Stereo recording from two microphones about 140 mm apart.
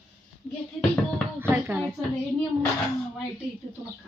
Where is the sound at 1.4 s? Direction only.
15° right (ahead or behind).